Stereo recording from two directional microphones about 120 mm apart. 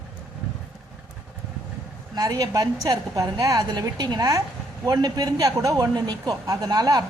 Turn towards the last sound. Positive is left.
turn(degrees=-30)  # may be behind; listen again after turning